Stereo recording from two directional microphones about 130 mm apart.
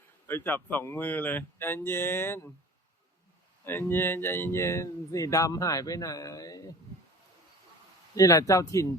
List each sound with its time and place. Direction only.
0.3 s speech: 15° left (ahead or behind)
3.7 s speech: 15° left (ahead or behind)
8.1 s speech: 25° left (ahead or behind)